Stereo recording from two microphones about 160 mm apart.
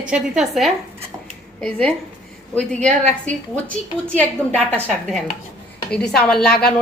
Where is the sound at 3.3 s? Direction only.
50° right (ahead or behind).